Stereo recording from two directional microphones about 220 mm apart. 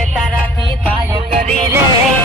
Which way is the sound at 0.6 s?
25° right (ahead or behind).